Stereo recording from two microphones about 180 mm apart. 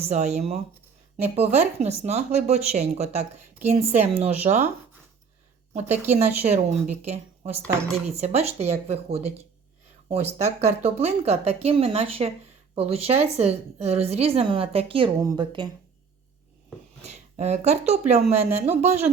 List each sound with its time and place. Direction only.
0.1 s a woman's voice: 40° right (ahead or behind)
5.9 s a woman's voice: 10° right (ahead or behind)
6.1 s a woman's voice: 35° right (ahead or behind)
17.0 s a woman's voice: 35° right (ahead or behind)